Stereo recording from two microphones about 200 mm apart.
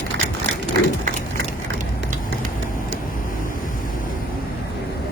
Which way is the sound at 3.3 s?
40° left (ahead or behind).